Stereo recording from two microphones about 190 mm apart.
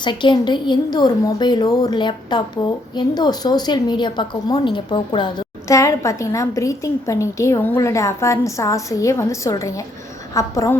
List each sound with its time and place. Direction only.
0.0 s a woman's voice: 25° left (ahead or behind)